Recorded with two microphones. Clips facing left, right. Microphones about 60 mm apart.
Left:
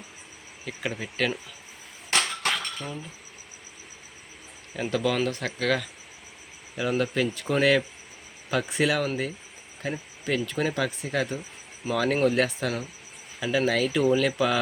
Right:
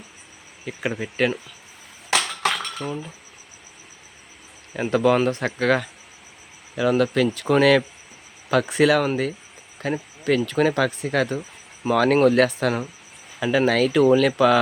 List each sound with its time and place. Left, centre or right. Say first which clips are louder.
0.6 s speech: right 5 dB; right
2.4 s cutlery: right 4 dB; right
4.8 s speech: right 7 dB; right
6.7 s speech: right 6 dB; right
8.4 s speech: right 7 dB; right